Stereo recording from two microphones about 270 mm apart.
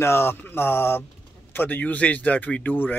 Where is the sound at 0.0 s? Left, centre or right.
Centre.